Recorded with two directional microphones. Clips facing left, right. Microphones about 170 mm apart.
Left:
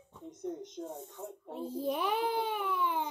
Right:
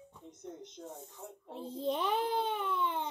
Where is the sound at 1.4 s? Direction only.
5° left (ahead or behind).